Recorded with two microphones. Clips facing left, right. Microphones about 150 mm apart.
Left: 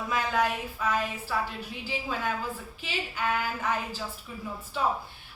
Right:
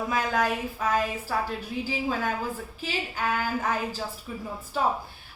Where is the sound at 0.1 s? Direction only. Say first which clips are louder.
Even; 40° right (ahead or behind).